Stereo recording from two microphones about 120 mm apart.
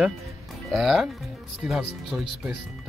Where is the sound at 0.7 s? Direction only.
Centre (ahead or behind).